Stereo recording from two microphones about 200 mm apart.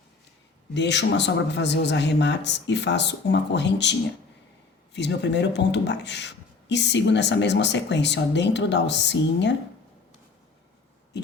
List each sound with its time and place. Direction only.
0.7 s speech: 60° left (ahead or behind)
4.9 s speech: 60° left (ahead or behind)